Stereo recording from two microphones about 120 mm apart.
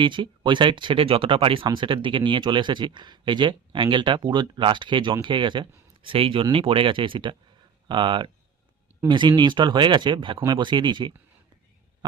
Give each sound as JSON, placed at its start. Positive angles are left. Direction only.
{"t": 0.0, "sound": "speech", "side_deg": -40}